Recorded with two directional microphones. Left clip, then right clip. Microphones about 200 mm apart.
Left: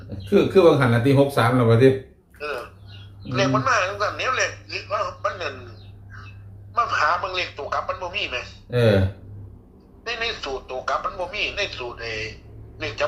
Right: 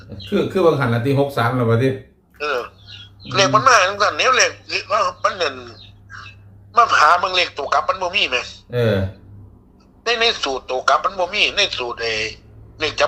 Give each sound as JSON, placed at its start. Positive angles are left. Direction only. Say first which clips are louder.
{"t": 0.3, "sound": "speech", "louder": "left 1 dB", "side_deg": -5}
{"t": 2.4, "sound": "a sound", "louder": "right 8 dB", "side_deg": -40}
{"t": 6.7, "sound": "a man's voice", "louder": "right 8 dB", "side_deg": -40}
{"t": 8.7, "sound": "speech", "louder": "even", "side_deg": 0}
{"t": 10.0, "sound": "a man's voice", "louder": "right 9 dB", "side_deg": -40}